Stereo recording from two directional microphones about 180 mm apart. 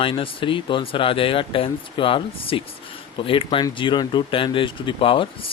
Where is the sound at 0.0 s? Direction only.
30° left (ahead or behind).